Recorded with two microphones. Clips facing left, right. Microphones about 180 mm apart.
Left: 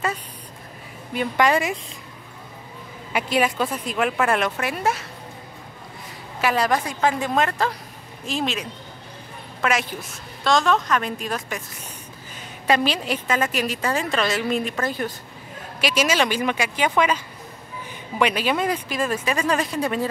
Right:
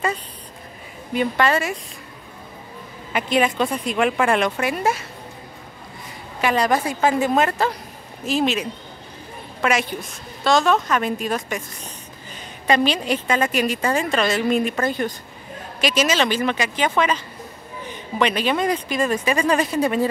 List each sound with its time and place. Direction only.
1.1 s a woman's voice: centre (ahead or behind)
1.4 s speech: 15° left (ahead or behind)
3.1 s a woman's voice: 5° left (ahead or behind)
6.4 s a woman's voice: 5° left (ahead or behind)
12.6 s a woman's voice: 5° left (ahead or behind)